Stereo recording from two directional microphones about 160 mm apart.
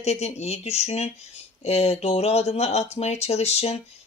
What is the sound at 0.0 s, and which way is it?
Speech, 40° left (ahead or behind).